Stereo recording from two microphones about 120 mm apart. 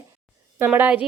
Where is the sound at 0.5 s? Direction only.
15° right (ahead or behind).